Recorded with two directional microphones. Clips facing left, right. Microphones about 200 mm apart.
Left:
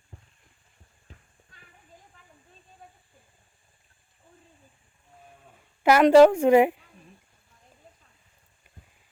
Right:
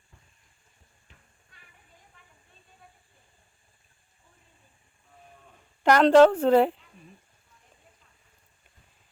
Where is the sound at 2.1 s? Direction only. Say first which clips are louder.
Left 2 dB; 40° left (ahead or behind).